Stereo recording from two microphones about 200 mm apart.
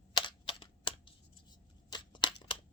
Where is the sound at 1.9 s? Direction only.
20° left (ahead or behind).